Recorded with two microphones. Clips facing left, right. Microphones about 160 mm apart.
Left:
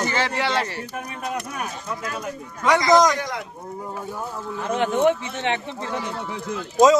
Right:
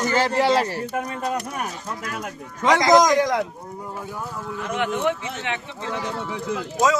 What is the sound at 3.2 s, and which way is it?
Speech, 90° right.